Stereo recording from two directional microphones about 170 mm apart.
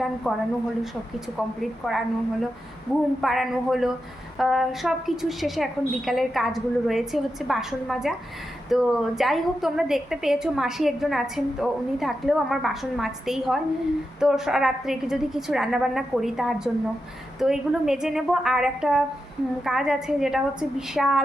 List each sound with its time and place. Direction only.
0.3 s a woman's voice: centre (ahead or behind)